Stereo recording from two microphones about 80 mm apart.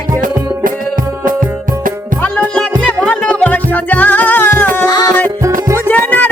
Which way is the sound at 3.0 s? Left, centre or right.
Centre.